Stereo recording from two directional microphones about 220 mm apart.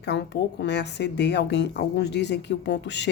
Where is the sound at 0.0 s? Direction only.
50° left (ahead or behind).